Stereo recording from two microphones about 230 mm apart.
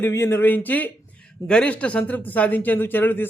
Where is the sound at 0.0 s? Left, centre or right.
Centre.